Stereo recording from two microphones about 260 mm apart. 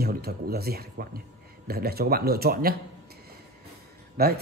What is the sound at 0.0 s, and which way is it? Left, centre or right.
Speech, right.